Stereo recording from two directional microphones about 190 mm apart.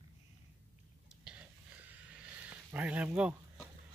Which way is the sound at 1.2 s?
5° right (ahead or behind).